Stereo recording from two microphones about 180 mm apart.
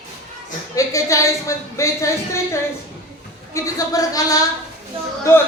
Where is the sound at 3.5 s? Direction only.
15° left (ahead or behind).